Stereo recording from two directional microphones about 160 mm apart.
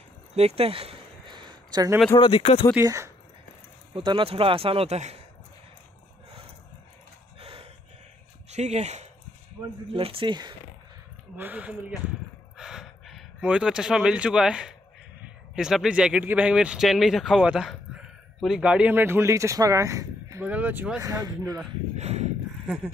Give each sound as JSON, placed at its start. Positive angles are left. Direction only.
{"t": 0.3, "sound": "a sound", "side_deg": -40}
{"t": 2.1, "sound": "speech", "side_deg": 35}
{"t": 2.8, "sound": "speech", "side_deg": -20}
{"t": 3.9, "sound": "a man's voice", "side_deg": -30}
{"t": 7.3, "sound": "a sound", "side_deg": -35}
{"t": 8.5, "sound": "speech", "side_deg": -45}
{"t": 9.9, "sound": "a man's voice", "side_deg": -35}
{"t": 11.3, "sound": "speech", "side_deg": -10}
{"t": 12.5, "sound": "a sound", "side_deg": -5}
{"t": 15.2, "sound": "speech", "side_deg": -5}
{"t": 21.0, "sound": "speech", "side_deg": -20}
{"t": 21.9, "sound": "a sound", "side_deg": -45}